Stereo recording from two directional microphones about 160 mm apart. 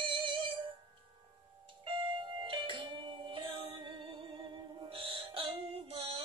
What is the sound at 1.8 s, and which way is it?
Music, 30° right (ahead or behind).